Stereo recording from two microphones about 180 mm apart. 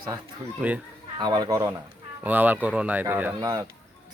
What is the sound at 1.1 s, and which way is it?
Speech, 25° right (ahead or behind).